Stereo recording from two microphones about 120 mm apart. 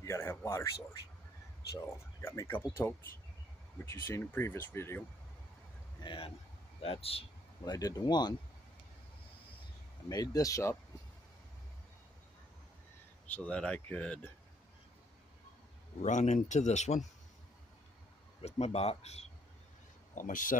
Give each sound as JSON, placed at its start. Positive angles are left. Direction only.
{"t": 0.0, "sound": "speech", "side_deg": 20}
{"t": 2.2, "sound": "speech", "side_deg": 20}
{"t": 6.0, "sound": "speech", "side_deg": 45}
{"t": 7.6, "sound": "speech", "side_deg": 30}
{"t": 10.0, "sound": "speech", "side_deg": 30}
{"t": 13.3, "sound": "speech", "side_deg": 10}
{"t": 16.0, "sound": "speech", "side_deg": 80}
{"t": 18.4, "sound": "speech", "side_deg": 60}
{"t": 20.2, "sound": "speech", "side_deg": 90}